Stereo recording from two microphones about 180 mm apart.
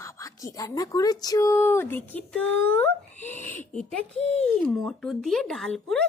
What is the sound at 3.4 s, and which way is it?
Speech, 10° left (ahead or behind).